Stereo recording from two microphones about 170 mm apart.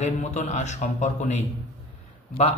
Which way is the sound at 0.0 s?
45° left (ahead or behind).